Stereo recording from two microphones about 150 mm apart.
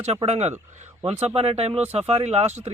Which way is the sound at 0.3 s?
45° right (ahead or behind).